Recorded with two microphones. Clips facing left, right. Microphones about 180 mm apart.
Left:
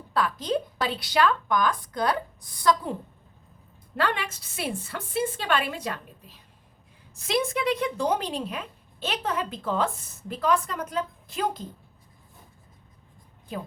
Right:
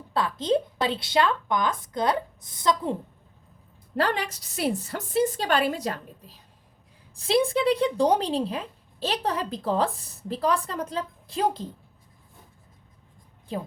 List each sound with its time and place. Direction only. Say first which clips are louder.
0.1 s a woman's voice: right 2 dB; 25° right (ahead or behind)
3.9 s a woman's voice: right 2 dB; 40° right (ahead or behind)